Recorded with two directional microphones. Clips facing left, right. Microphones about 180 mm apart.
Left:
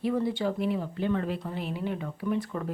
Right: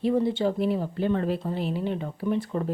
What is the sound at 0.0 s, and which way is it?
Speech, 25° right (ahead or behind).